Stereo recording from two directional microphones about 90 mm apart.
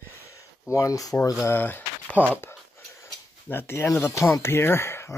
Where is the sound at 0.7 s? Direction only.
35° left (ahead or behind).